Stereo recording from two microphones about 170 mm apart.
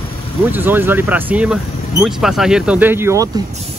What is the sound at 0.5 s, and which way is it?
Speech, 10° right (ahead or behind).